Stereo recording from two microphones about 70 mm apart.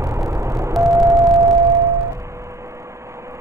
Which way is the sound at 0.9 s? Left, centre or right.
Right.